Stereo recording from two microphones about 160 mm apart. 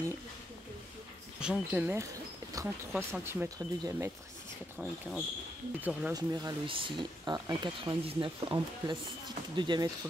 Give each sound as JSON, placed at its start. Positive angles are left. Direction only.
{"t": 1.4, "sound": "speech", "side_deg": -5}
{"t": 5.8, "sound": "speech", "side_deg": -10}
{"t": 6.1, "sound": "speech", "side_deg": -25}